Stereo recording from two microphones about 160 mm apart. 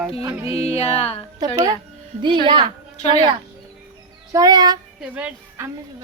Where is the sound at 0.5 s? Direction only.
40° left (ahead or behind).